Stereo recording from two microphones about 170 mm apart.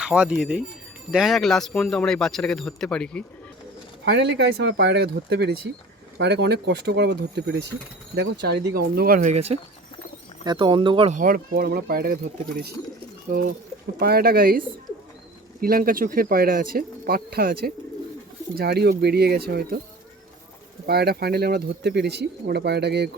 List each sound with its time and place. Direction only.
0.0 s speech: 5° right (ahead or behind)
4.0 s speech: 90° right; by 9.3 s 60° right (ahead or behind)
9.3 s speech: 35° right (ahead or behind)
10.4 s speech: 25° right (ahead or behind)
11.1 s speech: 55° right (ahead or behind)
13.3 s speech: 60° right (ahead or behind)
15.6 s speech: 60° right (ahead or behind)
20.8 s speech: 65° right (ahead or behind)